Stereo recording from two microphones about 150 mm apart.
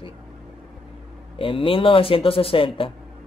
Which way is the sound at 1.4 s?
35° left (ahead or behind).